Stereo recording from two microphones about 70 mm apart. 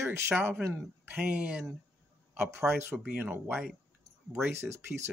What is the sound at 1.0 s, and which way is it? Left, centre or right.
Speech, centre.